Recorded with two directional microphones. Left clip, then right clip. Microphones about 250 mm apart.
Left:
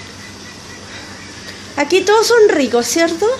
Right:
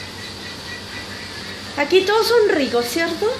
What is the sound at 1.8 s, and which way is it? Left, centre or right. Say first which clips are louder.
A woman's voice: left 4 dB; left.